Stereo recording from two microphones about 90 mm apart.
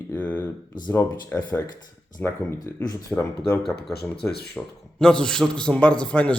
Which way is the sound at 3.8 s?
Centre (ahead or behind).